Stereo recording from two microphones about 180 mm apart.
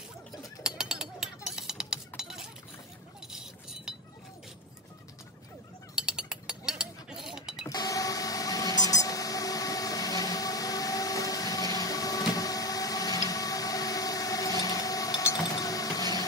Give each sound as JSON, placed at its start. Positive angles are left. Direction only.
{"t": 0.7, "sound": "chink", "side_deg": -5}
{"t": 5.9, "sound": "chink", "side_deg": -5}
{"t": 7.6, "sound": "a sound", "side_deg": 20}